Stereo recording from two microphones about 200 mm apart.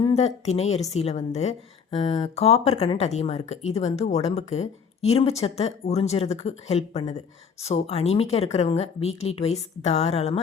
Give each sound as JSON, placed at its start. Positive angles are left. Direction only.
{"t": 0.0, "sound": "a woman's voice", "side_deg": 30}